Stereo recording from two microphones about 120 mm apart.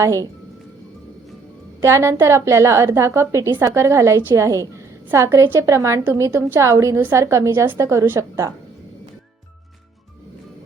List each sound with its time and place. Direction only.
0.0 s a woman's voice: 25° right (ahead or behind)
1.8 s a woman's voice: 25° right (ahead or behind)